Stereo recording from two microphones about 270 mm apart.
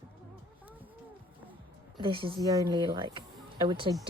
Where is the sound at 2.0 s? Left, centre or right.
Centre.